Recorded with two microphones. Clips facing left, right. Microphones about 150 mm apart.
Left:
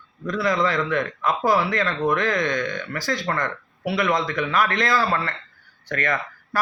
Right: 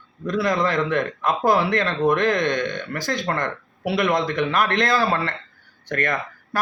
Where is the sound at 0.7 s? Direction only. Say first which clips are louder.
Right 2 dB; 20° right (ahead or behind).